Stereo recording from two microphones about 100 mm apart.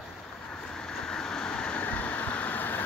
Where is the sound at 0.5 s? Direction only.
10° left (ahead or behind).